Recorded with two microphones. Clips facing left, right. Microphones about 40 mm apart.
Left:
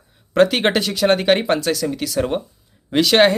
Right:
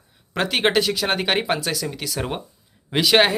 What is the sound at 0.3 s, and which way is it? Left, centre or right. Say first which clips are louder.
Speech: left 4 dB; centre.